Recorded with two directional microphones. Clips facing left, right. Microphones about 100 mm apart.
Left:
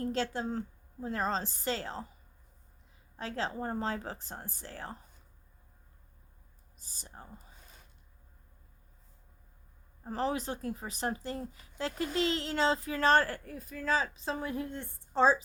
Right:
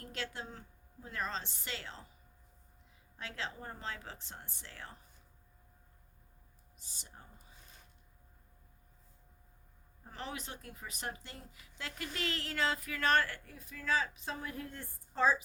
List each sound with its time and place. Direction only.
0.0 s speech: 35° left (ahead or behind)
3.2 s speech: 35° left (ahead or behind)
6.7 s speech: 40° left (ahead or behind)
10.0 s speech: 35° left (ahead or behind)